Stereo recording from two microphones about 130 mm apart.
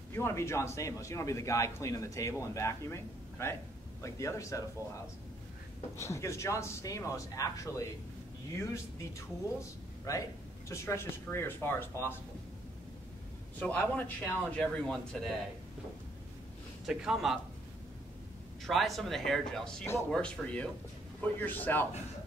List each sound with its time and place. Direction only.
0.1 s a man's voice: 20° left (ahead or behind)
5.9 s a man's voice: 20° left (ahead or behind)
9.6 s a man's voice: 25° left (ahead or behind)
13.6 s a man's voice: 10° left (ahead or behind)
16.8 s speech: 5° right (ahead or behind)
18.6 s a man's voice: centre (ahead or behind)